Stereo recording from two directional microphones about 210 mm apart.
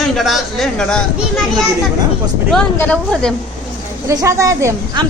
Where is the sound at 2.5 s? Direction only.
5° left (ahead or behind).